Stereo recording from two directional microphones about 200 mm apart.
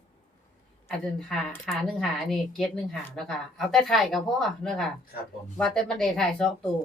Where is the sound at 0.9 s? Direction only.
Centre (ahead or behind).